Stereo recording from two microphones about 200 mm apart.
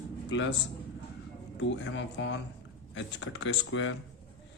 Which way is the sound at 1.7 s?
70° left (ahead or behind).